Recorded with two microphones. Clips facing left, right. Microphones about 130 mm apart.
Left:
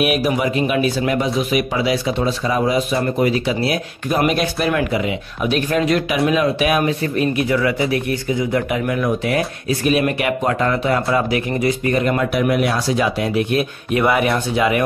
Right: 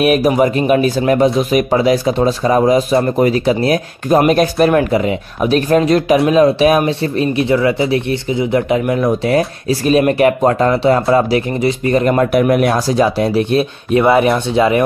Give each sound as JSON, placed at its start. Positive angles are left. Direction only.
{"t": 0.0, "sound": "speech", "side_deg": -40}